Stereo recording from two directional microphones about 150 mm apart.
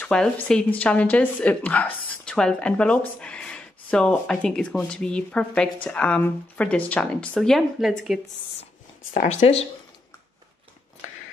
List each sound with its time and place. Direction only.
0.0 s a woman's voice: 10° left (ahead or behind)
9.3 s speech: 40° left (ahead or behind)